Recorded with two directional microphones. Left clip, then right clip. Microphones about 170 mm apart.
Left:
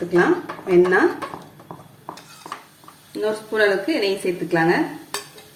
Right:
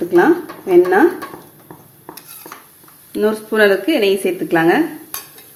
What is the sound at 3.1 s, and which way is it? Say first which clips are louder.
A woman's voice: right 6 dB; 55° right (ahead or behind).